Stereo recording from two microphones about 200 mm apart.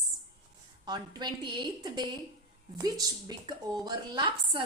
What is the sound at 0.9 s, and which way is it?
A woman's voice, 20° right (ahead or behind).